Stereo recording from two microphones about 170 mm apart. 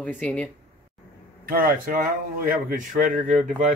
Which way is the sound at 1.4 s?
60° right (ahead or behind).